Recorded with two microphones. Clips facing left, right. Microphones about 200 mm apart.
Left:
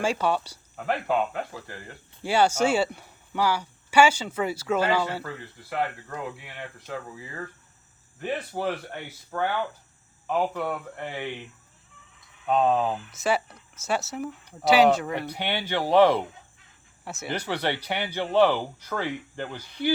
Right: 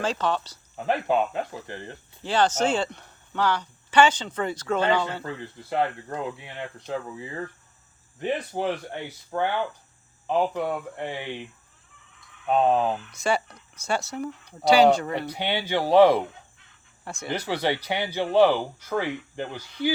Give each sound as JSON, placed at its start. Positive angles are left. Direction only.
{"t": 0.0, "sound": "speech", "side_deg": 10}
{"t": 0.9, "sound": "speech", "side_deg": -20}
{"t": 2.2, "sound": "speech", "side_deg": 10}
{"t": 5.6, "sound": "speech", "side_deg": -25}
{"t": 12.5, "sound": "speech", "side_deg": -15}
{"t": 13.1, "sound": "speech", "side_deg": 5}
{"t": 15.3, "sound": "speech", "side_deg": -15}
{"t": 17.0, "sound": "speech", "side_deg": 5}
{"t": 17.2, "sound": "speech", "side_deg": -10}